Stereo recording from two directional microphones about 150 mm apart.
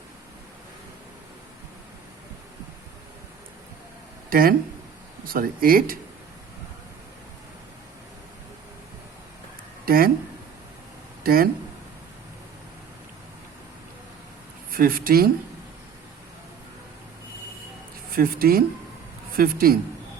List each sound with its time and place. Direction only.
4.3 s speech: 70° right (ahead or behind)
9.8 s speech: 75° right (ahead or behind)
11.2 s speech: 80° right
14.7 s speech: 75° right (ahead or behind)
18.1 s a man's voice: 75° right (ahead or behind)